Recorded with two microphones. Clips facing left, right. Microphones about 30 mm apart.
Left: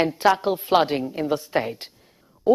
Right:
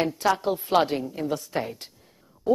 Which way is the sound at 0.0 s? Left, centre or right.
Left.